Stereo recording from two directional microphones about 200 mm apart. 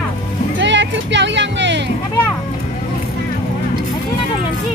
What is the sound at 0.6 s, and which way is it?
Music, 65° right (ahead or behind).